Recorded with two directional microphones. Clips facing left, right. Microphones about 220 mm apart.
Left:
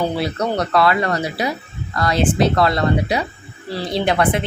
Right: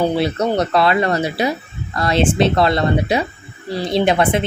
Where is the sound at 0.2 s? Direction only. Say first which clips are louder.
Right 3 dB; 25° right (ahead or behind).